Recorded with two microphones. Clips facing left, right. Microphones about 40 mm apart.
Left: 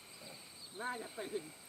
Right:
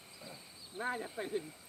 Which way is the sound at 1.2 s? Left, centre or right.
Right.